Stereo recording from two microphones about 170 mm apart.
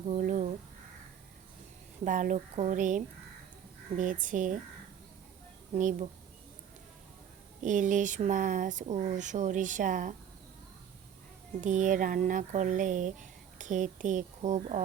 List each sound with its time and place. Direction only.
0.2 s crow: 45° right (ahead or behind)
2.0 s speech: 50° right (ahead or behind)
5.7 s speech: 50° right (ahead or behind)
7.6 s speech: 50° right (ahead or behind)
11.6 s speech: 50° right (ahead or behind)